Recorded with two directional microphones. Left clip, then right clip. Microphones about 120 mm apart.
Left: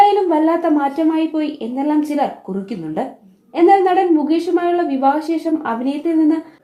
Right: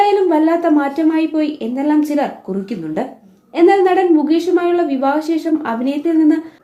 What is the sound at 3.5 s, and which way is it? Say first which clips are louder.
A woman's voice: even; 20° left (ahead or behind).